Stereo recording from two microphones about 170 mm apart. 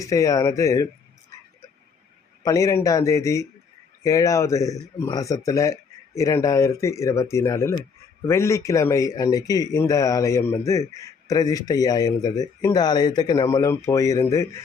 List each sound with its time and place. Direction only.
0.0 s speech: 20° left (ahead or behind)
2.4 s speech: 20° left (ahead or behind)